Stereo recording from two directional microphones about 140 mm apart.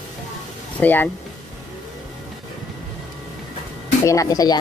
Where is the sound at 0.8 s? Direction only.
15° left (ahead or behind).